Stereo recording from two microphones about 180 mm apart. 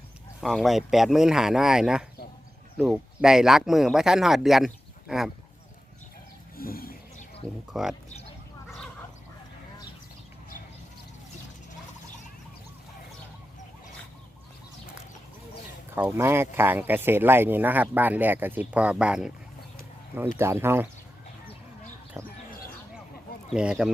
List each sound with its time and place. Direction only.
0.4 s speech: centre (ahead or behind)
6.6 s a sound: 55° left (ahead or behind)
7.7 s speech: 5° right (ahead or behind)
16.0 s speech: 10° right (ahead or behind)
20.3 s speech: 15° right (ahead or behind)
22.2 s speech: 15° right (ahead or behind)
23.5 s speech: 5° right (ahead or behind)